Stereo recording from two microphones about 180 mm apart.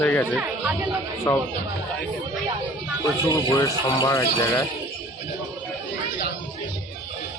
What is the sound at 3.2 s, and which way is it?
Speech, 20° left (ahead or behind).